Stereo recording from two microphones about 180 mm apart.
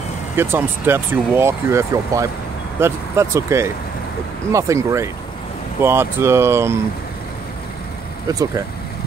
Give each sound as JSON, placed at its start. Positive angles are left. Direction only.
{"t": 0.4, "sound": "speech", "side_deg": -10}
{"t": 8.3, "sound": "speech", "side_deg": -20}